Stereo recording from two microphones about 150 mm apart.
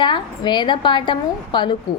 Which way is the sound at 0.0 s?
30° left (ahead or behind).